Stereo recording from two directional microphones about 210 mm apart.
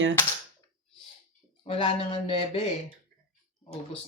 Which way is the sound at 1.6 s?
25° left (ahead or behind).